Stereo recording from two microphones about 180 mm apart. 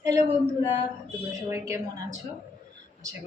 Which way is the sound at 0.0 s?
15° right (ahead or behind).